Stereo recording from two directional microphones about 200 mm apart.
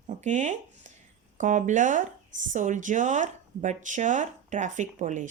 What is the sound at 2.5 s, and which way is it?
Speech, 40° right (ahead or behind).